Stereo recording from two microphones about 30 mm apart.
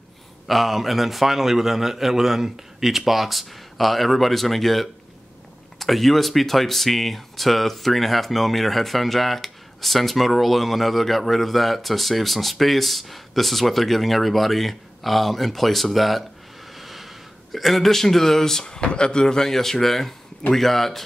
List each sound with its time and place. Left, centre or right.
0.5 s speech: centre
16.7 s a sound: centre
17.6 s speech: centre
18.8 s speech: left; by 21.0 s centre